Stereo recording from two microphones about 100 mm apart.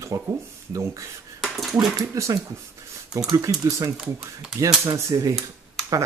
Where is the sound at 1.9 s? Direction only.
35° right (ahead or behind).